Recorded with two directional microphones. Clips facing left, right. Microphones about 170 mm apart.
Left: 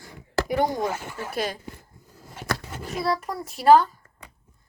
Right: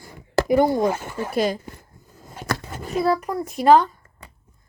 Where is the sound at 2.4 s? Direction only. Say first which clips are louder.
Right 2 dB; 45° right (ahead or behind).